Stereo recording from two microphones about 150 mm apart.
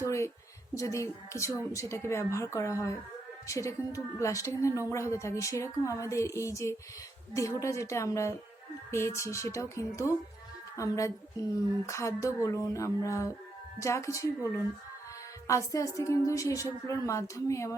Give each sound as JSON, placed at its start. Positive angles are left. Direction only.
{"t": 0.0, "sound": "a woman's voice", "side_deg": 20}